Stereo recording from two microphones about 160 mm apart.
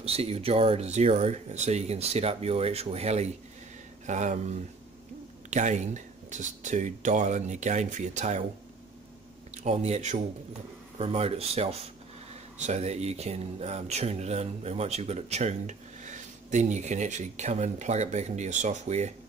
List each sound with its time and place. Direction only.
0.0 s speech: 40° right (ahead or behind)
5.5 s speech: 50° right (ahead or behind)
9.6 s speech: 45° right (ahead or behind)